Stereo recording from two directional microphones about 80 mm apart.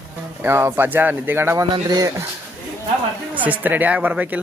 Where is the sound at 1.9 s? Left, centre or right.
Right.